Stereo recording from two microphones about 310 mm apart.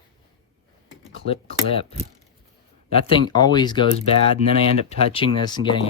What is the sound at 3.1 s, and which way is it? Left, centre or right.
Speech, centre.